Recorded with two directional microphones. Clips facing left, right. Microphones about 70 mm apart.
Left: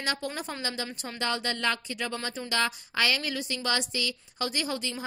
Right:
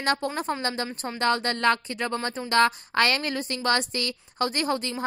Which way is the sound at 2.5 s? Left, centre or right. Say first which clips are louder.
Right 9 dB; right.